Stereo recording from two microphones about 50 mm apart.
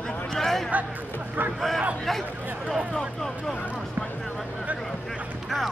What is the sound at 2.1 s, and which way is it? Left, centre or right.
Speech, centre.